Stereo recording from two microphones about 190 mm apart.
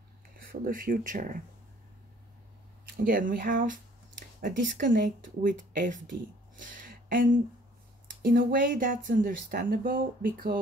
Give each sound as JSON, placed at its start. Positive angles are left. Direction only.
{"t": 0.4, "sound": "speech", "side_deg": -50}
{"t": 3.1, "sound": "speech", "side_deg": -45}